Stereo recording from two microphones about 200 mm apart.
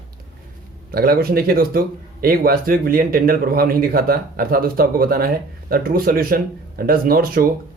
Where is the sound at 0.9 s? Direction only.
50° right (ahead or behind).